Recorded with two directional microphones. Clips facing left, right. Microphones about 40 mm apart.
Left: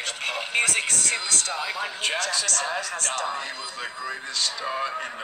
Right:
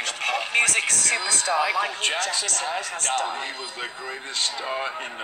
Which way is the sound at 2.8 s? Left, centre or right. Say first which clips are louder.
Right 2 dB; right.